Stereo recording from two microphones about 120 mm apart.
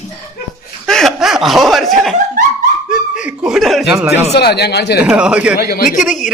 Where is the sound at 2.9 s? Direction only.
10° right (ahead or behind).